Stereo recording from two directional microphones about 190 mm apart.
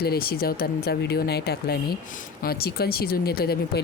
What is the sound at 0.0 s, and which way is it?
Speech, 55° left (ahead or behind).